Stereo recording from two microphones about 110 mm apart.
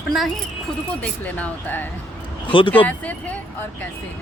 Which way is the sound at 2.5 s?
50° left (ahead or behind).